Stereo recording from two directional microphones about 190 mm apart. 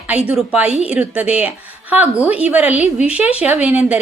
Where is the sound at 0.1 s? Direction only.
5° right (ahead or behind).